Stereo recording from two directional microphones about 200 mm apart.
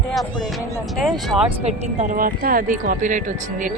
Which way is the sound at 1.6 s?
40° right (ahead or behind).